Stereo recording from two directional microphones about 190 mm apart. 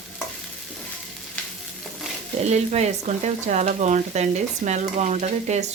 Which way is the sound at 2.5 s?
35° right (ahead or behind).